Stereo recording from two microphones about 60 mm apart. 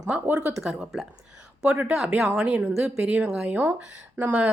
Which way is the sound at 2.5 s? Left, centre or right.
Right.